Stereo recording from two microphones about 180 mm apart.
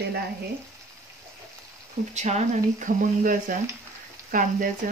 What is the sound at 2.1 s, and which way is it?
Speech, 40° right (ahead or behind).